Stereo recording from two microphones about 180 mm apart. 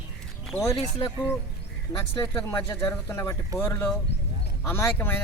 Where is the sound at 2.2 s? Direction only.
15° left (ahead or behind).